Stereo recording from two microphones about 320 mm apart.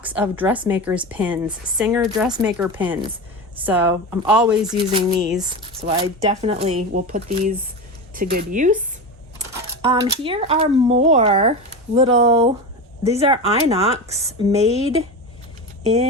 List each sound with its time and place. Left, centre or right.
0.0 s a woman's voice: centre
4.3 s speech: centre
4.8 s a woman's voice: centre
9.4 s a sound: right
9.8 s a woman's voice: centre